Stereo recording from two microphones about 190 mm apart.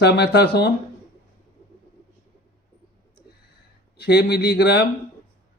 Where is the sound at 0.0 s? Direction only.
60° left (ahead or behind).